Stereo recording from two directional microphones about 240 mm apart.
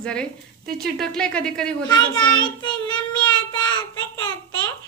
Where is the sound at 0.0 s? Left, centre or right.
Centre.